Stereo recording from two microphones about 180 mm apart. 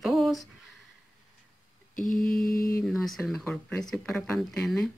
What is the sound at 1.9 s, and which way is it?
Mantra, 50° left (ahead or behind).